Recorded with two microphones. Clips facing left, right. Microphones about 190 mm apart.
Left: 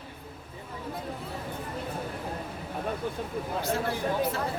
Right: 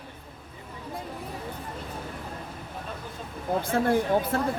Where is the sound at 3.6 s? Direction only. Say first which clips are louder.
Right 7 dB; 55° right (ahead or behind).